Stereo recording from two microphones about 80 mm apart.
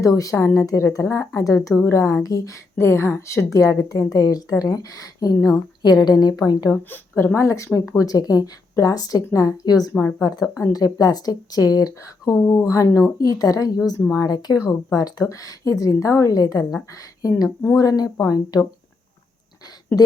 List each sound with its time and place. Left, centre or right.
0.0 s a woman's voice: left
2.7 s a woman's voice: left
5.8 s a woman's voice: left
6.9 s a woman's voice: left